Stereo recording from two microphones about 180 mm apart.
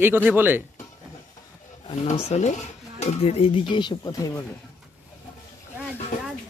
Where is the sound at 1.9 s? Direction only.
35° left (ahead or behind); by 4.4 s 20° left (ahead or behind).